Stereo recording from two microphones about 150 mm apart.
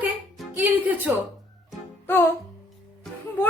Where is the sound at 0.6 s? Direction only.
10° right (ahead or behind).